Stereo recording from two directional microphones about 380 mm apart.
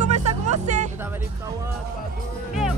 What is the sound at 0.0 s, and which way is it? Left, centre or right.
Music, centre.